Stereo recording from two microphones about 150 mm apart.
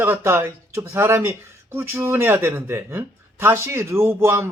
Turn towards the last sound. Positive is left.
turn(degrees=-15)  # may be behind; listen again after turning